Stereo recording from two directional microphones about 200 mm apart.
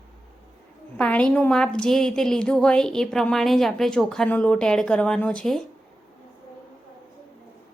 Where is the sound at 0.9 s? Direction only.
5° left (ahead or behind).